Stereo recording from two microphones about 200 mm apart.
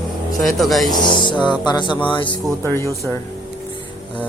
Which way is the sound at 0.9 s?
20° left (ahead or behind).